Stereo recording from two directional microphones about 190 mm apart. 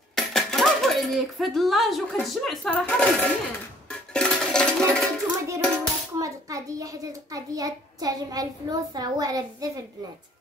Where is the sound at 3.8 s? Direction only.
5° left (ahead or behind).